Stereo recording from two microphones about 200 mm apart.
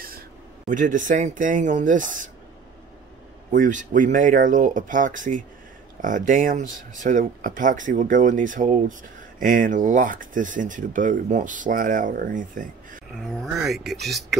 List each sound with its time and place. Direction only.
0.7 s speech: 40° right (ahead or behind)
3.5 s speech: 40° right (ahead or behind)
13.2 s speech: centre (ahead or behind)